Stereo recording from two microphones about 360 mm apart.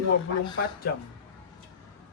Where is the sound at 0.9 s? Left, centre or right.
Left.